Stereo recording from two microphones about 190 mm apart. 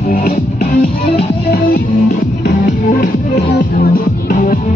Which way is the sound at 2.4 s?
45° left (ahead or behind).